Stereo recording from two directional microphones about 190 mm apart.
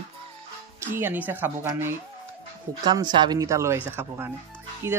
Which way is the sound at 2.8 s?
20° right (ahead or behind).